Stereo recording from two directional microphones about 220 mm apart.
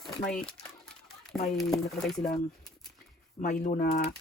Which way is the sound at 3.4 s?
35° left (ahead or behind).